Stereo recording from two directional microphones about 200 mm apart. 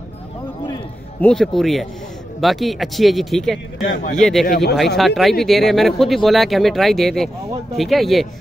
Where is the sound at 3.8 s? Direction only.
45° left (ahead or behind).